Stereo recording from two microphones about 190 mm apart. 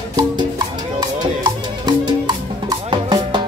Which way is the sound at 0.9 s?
20° right (ahead or behind).